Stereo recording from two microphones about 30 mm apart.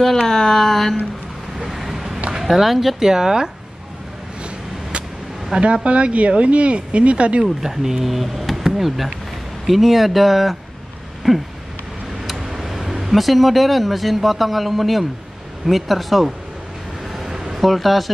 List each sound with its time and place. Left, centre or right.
0.3 s speech: centre
1.6 s vehicle: centre
2.5 s speech: centre
3.0 s speech: centre
5.6 s speech: right
7.6 s speech: centre
12.4 s a sound: centre
13.2 s speech: centre
17.1 s a sound: centre
17.4 s speech: centre